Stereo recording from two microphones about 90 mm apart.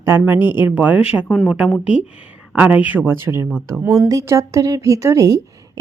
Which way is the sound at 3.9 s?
40° right (ahead or behind).